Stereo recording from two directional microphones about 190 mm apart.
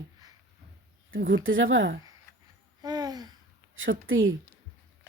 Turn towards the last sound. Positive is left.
turn(degrees=-90)